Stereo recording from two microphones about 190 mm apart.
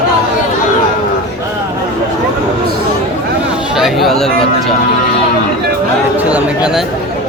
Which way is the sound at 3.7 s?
Centre (ahead or behind).